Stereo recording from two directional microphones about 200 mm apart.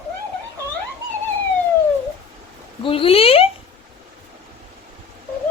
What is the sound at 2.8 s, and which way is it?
Speech, 25° left (ahead or behind).